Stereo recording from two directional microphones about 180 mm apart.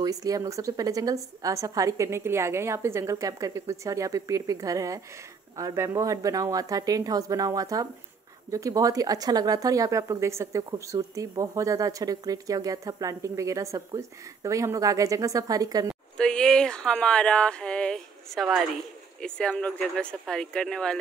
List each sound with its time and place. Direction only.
0.0 s a woman's voice: 20° right (ahead or behind)
16.2 s speech: 5° left (ahead or behind)